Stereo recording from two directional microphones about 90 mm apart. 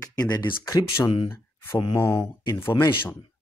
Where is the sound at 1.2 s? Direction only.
25° left (ahead or behind).